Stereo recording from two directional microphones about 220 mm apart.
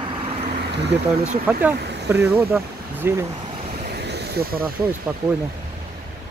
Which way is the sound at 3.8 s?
50° right (ahead or behind).